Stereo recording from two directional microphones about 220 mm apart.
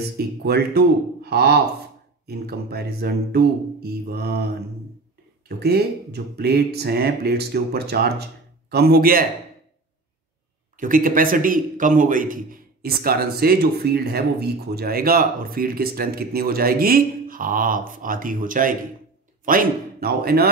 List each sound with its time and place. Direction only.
0.4 s speech: 45° right (ahead or behind)
5.6 s speech: 45° right (ahead or behind)
10.8 s a man's voice: 40° right (ahead or behind)